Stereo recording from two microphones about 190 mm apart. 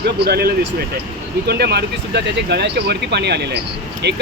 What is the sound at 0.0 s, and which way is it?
Speech, 55° right (ahead or behind).